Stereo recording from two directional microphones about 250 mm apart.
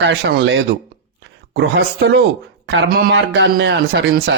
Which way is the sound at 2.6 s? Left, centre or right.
Right.